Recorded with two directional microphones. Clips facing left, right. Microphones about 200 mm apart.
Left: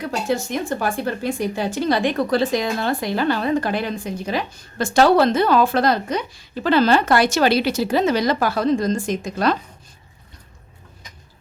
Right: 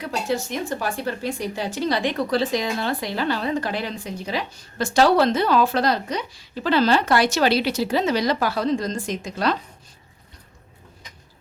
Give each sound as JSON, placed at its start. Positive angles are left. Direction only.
{"t": 0.0, "sound": "a woman's voice", "side_deg": 50}